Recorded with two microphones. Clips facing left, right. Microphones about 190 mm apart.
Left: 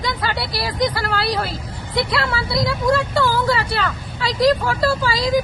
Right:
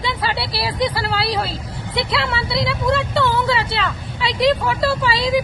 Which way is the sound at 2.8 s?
Centre (ahead or behind).